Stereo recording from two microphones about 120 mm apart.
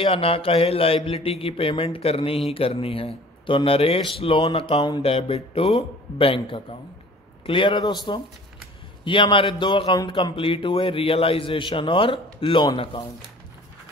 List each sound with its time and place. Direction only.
0.0 s a man's voice: 50° left (ahead or behind)